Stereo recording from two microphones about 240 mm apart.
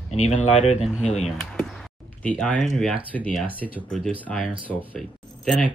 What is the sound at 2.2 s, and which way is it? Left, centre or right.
Speech, centre.